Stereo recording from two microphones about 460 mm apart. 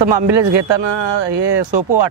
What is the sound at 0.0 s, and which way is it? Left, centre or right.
Speech, right.